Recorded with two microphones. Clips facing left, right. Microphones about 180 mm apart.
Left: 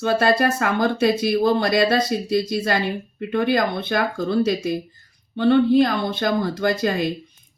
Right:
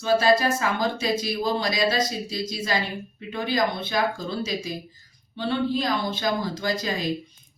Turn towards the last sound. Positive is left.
turn(degrees=55)  # may be behind; listen again after turning